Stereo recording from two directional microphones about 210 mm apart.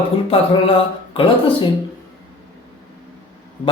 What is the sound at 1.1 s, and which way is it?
Speech, 25° left (ahead or behind).